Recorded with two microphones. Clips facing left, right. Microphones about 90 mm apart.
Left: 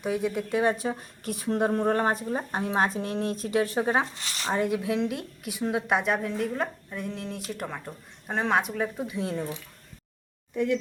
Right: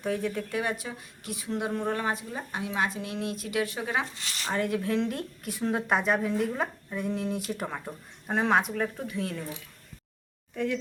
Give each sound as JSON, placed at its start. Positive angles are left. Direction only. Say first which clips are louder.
{"t": 0.0, "sound": "speech", "louder": "left 2 dB", "side_deg": 15}
{"t": 0.5, "sound": "a woman's voice", "louder": "left 6 dB", "side_deg": 30}
{"t": 4.4, "sound": "a woman's voice", "louder": "left 2 dB", "side_deg": 20}
{"t": 9.0, "sound": "speech", "louder": "left 3 dB", "side_deg": 20}